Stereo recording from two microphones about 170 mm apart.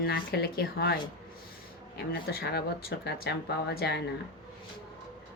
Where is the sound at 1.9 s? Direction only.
70° left (ahead or behind).